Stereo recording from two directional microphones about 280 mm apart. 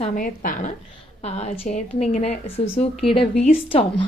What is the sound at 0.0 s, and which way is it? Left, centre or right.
A woman's voice, left.